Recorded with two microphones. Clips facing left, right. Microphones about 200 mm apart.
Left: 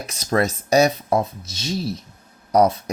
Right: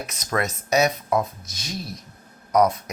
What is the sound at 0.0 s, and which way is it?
Speech, 30° left (ahead or behind).